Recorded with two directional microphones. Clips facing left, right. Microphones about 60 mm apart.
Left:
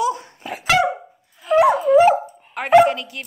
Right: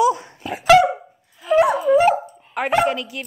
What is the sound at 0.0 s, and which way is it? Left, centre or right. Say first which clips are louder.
Dog: right 4 dB; centre.